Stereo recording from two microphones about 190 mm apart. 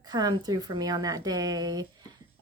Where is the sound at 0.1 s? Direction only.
20° right (ahead or behind).